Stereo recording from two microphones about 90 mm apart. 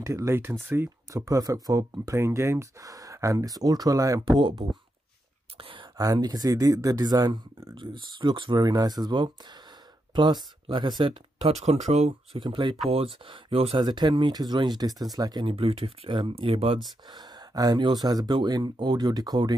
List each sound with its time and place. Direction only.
0.0 s speech: 35° right (ahead or behind)
4.4 s speech: 70° right (ahead or behind)
5.6 s whispering: 90° right
5.9 s speech: 45° right (ahead or behind)
7.7 s speech: 60° right (ahead or behind)
8.5 s speech: 45° right (ahead or behind)
11.7 s speech: 90° right
12.4 s speech: 55° right (ahead or behind)
12.9 s speech: 90° right
13.7 s speech: 50° right (ahead or behind)
15.4 s speech: 90° right
17.1 s speech: 45° right (ahead or behind)